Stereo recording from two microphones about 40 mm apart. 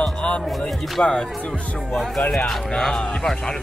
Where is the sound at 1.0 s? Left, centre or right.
Left.